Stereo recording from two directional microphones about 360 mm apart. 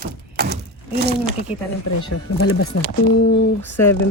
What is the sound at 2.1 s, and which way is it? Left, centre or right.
Speech, left.